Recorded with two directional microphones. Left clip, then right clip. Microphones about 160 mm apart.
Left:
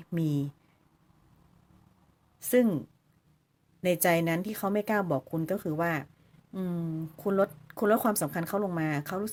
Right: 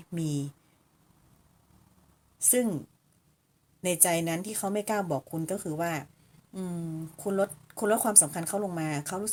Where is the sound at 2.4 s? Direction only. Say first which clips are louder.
Left 3 dB; 20° left (ahead or behind).